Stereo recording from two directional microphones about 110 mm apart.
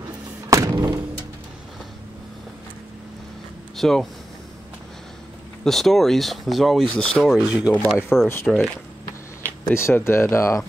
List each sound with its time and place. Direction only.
0.5 s thump: 30° right (ahead or behind)
3.7 s speech: centre (ahead or behind)
5.6 s speech: 5° left (ahead or behind)
7.7 s speech: 15° left (ahead or behind)
8.5 s speech: centre (ahead or behind)
9.4 s speech: 20° left (ahead or behind)